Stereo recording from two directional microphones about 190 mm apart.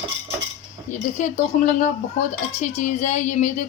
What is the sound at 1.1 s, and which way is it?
A woman's voice, 40° left (ahead or behind).